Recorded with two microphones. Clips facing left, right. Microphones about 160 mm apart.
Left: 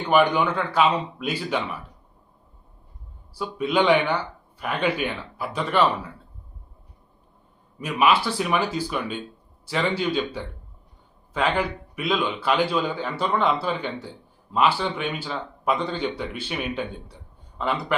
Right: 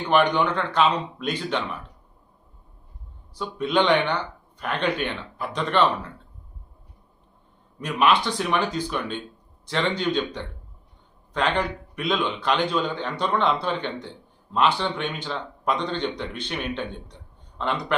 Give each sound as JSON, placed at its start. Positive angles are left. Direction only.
{"t": 0.1, "sound": "speech", "side_deg": 10}
{"t": 3.3, "sound": "speech", "side_deg": 5}
{"t": 7.8, "sound": "a man's voice", "side_deg": 5}